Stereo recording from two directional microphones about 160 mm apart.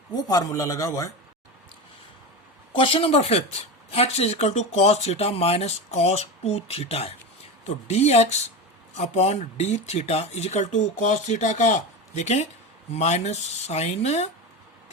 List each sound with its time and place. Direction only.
0.1 s a man's voice: 25° left (ahead or behind)
2.7 s speech: 35° left (ahead or behind)